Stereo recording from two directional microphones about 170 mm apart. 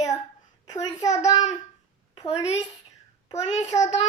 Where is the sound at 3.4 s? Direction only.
40° left (ahead or behind).